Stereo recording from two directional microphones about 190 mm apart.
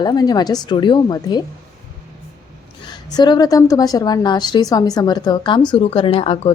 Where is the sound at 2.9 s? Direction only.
20° left (ahead or behind).